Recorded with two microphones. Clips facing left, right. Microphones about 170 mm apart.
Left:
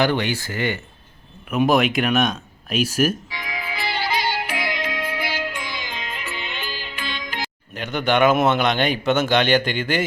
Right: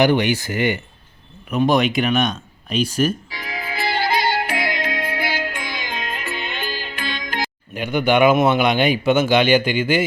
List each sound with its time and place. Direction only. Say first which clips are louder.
0.0 s speech: right 4 dB; 15° right (ahead or behind)
1.5 s speech: right 1 dB; centre (ahead or behind)
3.2 s music: right 1 dB; 35° right (ahead or behind)
7.7 s speech: right 3 dB; 10° right (ahead or behind)